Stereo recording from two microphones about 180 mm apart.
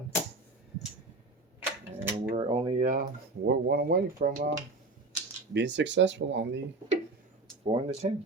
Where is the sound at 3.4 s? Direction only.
65° right (ahead or behind).